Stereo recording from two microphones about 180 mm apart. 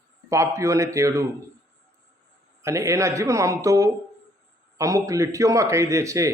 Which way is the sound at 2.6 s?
15° right (ahead or behind).